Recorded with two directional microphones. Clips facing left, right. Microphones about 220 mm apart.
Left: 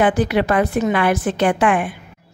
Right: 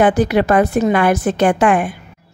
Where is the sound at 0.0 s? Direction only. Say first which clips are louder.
Right 3 dB; 45° right (ahead or behind).